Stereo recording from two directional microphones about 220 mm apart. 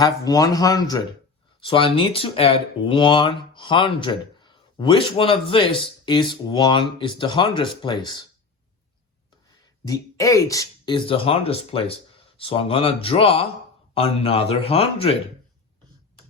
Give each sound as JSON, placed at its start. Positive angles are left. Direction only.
{"t": 0.0, "sound": "speech", "side_deg": 15}
{"t": 9.8, "sound": "speech", "side_deg": 15}